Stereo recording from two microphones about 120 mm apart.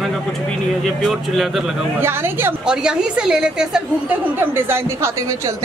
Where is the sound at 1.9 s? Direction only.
20° right (ahead or behind).